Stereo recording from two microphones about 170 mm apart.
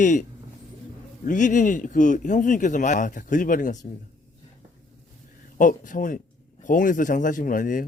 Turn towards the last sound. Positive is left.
turn(degrees=50)  # may be behind; listen again after turning